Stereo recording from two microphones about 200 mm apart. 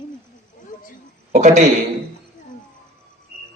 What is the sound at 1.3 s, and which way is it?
Speech, 35° right (ahead or behind).